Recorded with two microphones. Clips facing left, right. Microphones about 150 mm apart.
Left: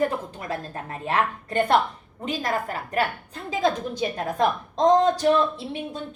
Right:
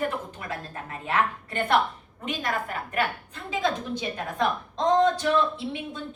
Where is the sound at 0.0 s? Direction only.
35° left (ahead or behind).